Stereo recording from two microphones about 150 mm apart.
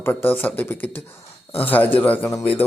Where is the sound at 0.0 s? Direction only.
15° left (ahead or behind).